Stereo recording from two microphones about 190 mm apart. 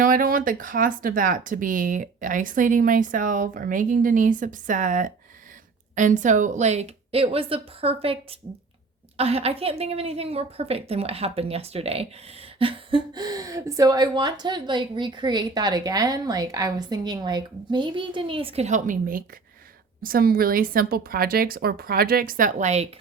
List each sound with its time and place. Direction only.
0.0 s a woman's voice: 50° right (ahead or behind)